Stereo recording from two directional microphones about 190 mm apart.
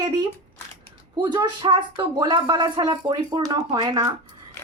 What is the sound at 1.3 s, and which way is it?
Speech, 20° right (ahead or behind).